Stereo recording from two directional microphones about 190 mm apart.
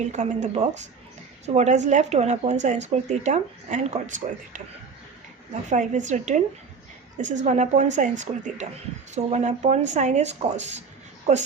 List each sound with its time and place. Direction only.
0.1 s speech: 40° right (ahead or behind)
5.7 s speech: 40° right (ahead or behind)